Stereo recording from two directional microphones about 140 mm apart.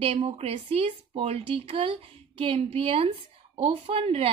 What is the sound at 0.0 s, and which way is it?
A woman's voice, 45° right (ahead or behind).